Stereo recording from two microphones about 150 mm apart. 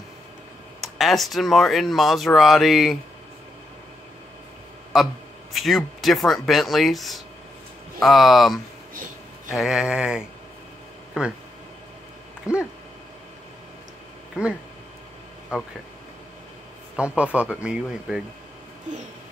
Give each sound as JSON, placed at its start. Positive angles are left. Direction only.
{"t": 0.7, "sound": "speech", "side_deg": 0}
{"t": 4.9, "sound": "speech", "side_deg": 0}
{"t": 12.5, "sound": "speech", "side_deg": 20}
{"t": 14.3, "sound": "speech", "side_deg": -5}
{"t": 15.5, "sound": "speech", "side_deg": -5}
{"t": 16.9, "sound": "speech", "side_deg": -5}